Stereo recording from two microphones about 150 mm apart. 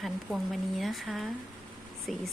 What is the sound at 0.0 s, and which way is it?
Speech, centre (ahead or behind).